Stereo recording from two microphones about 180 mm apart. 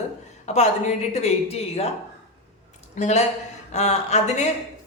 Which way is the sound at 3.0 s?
40° left (ahead or behind).